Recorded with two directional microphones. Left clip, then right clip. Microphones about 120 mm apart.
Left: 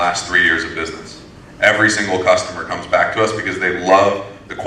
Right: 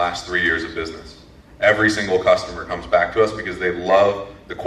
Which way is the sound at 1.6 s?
50° left (ahead or behind).